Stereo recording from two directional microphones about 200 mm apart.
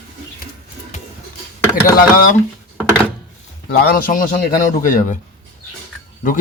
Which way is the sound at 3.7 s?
45° left (ahead or behind).